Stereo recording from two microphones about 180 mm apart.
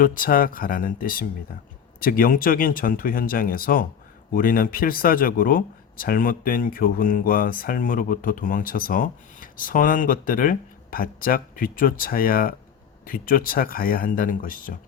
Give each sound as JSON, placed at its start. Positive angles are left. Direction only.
{"t": 0.0, "sound": "speech", "side_deg": 50}